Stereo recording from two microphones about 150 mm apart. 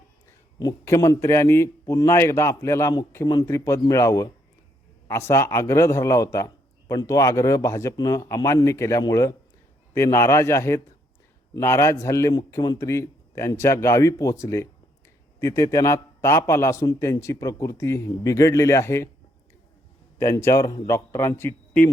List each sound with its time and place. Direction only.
0.6 s a man's voice: 20° left (ahead or behind)
20.1 s a man's voice: 20° left (ahead or behind)